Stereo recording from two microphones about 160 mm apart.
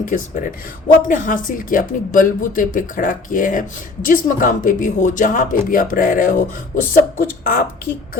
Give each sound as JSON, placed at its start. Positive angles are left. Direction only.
{"t": 0.0, "sound": "speech", "side_deg": 55}